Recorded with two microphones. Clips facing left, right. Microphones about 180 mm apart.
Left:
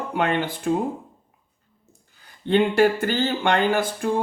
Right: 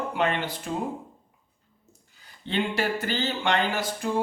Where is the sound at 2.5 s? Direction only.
50° left (ahead or behind).